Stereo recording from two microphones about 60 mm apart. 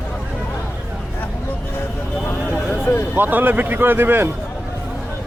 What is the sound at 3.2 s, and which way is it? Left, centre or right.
Speech, right.